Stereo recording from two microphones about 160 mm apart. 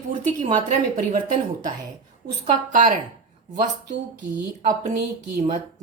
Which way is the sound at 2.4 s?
55° right (ahead or behind).